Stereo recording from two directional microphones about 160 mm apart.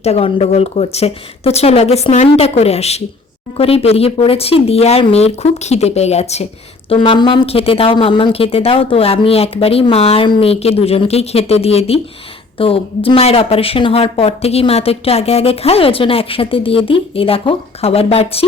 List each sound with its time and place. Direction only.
0.0 s speech: 40° left (ahead or behind)